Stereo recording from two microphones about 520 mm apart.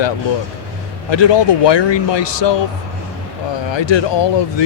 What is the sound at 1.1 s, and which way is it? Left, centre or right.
Speech, left.